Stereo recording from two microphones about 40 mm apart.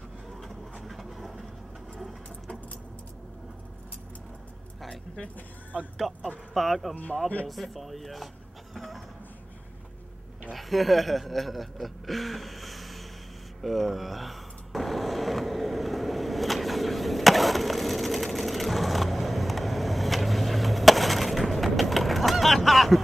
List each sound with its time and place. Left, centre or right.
0.8 s vehicle: centre
4.8 s keys jangling: left
5.9 s speech: centre
8.7 s a sound: centre
10.5 s speech: centre
13.6 s a sound: centre